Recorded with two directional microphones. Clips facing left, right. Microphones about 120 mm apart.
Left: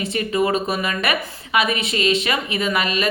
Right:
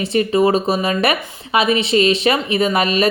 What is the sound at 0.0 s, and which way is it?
Speech, 35° right (ahead or behind).